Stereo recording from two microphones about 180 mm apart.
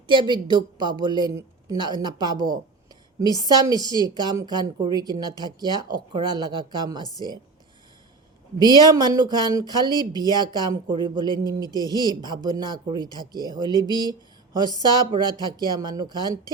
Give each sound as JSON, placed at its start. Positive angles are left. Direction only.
{"t": 0.1, "sound": "a woman's voice", "side_deg": -25}
{"t": 3.6, "sound": "a woman's voice", "side_deg": -20}
{"t": 8.5, "sound": "a woman's voice", "side_deg": -25}
{"t": 13.7, "sound": "speech", "side_deg": 20}
{"t": 14.1, "sound": "a sound", "side_deg": -20}
{"t": 14.8, "sound": "a woman's voice", "side_deg": -25}